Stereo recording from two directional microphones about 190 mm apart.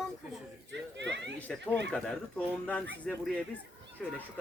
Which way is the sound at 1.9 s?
5° left (ahead or behind).